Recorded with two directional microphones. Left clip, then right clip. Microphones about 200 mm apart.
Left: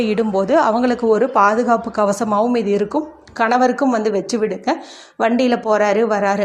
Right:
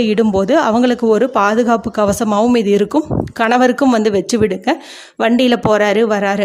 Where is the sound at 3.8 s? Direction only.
55° right (ahead or behind).